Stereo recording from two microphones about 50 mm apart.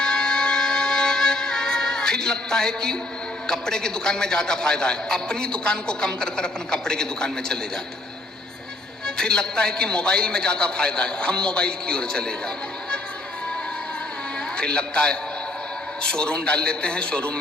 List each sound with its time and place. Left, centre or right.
0.0 s music: centre
3.4 s a man's voice: centre
9.0 s a man's voice: centre
14.5 s a man's voice: centre